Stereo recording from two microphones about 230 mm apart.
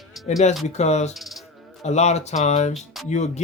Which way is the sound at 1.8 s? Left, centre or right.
Left.